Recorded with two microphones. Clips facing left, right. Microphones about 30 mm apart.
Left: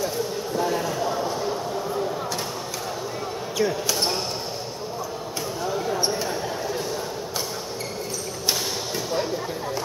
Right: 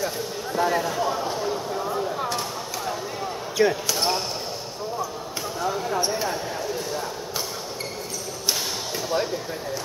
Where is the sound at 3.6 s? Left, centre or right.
Right.